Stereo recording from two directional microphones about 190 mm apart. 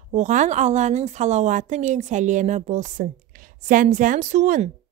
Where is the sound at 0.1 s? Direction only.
40° right (ahead or behind).